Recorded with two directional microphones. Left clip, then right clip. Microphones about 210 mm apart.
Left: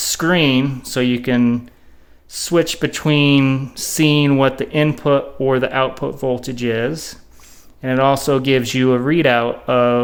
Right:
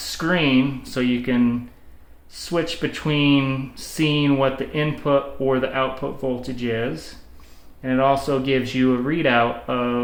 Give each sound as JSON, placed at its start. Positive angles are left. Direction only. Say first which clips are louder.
{"t": 0.1, "sound": "speech", "louder": "left 4 dB", "side_deg": 60}